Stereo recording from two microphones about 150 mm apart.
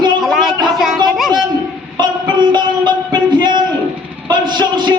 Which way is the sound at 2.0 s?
30° right (ahead or behind).